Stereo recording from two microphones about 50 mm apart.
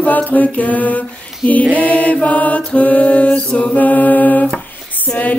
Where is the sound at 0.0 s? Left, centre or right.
Left.